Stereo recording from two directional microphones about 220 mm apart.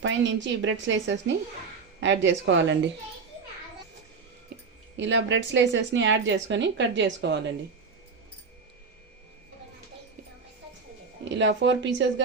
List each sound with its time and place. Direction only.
0.0 s speech: 55° right (ahead or behind)
4.5 s a sound: 45° right (ahead or behind)
4.9 s speech: 55° right (ahead or behind)
11.3 s speech: 55° right (ahead or behind)